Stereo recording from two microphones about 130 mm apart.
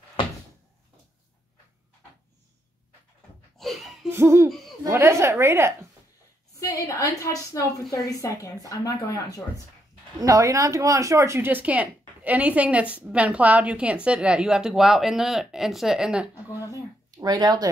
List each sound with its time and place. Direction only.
3.5 s a sound: centre (ahead or behind)
4.1 s hoot: 20° right (ahead or behind)
4.5 s hoot: centre (ahead or behind)
4.8 s speech: 20° right (ahead or behind)
6.6 s a woman's voice: 25° left (ahead or behind)
10.2 s a woman's voice: 25° right (ahead or behind); by 16.3 s 5° right (ahead or behind)
17.1 s speech: 30° right (ahead or behind)